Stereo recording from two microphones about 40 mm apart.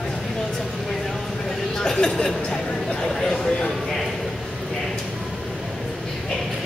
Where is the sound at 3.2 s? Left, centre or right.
Centre.